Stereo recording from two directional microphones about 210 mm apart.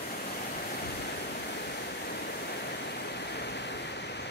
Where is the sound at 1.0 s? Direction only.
50° left (ahead or behind).